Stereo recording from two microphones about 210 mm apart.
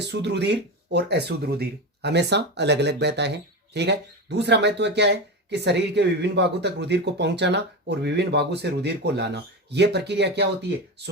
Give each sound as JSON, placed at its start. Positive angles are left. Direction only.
{"t": 0.0, "sound": "speech", "side_deg": -55}